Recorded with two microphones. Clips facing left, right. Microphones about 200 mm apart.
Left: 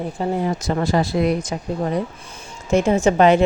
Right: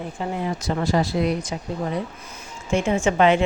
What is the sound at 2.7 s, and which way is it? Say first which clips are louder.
Speech: left 5 dB; 40° left (ahead or behind).